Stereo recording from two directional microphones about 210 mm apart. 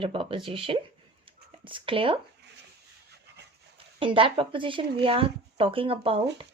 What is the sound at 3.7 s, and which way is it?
Speech, 25° right (ahead or behind).